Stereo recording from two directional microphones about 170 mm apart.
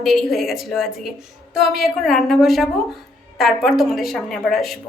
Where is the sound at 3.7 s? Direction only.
Centre (ahead or behind).